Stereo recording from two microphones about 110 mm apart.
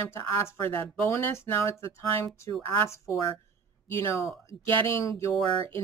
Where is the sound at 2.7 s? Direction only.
25° left (ahead or behind).